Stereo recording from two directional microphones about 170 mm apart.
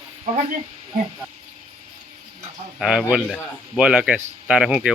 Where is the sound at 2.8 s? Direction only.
5° right (ahead or behind).